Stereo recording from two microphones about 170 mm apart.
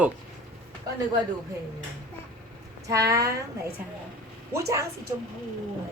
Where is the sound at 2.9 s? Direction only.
20° right (ahead or behind).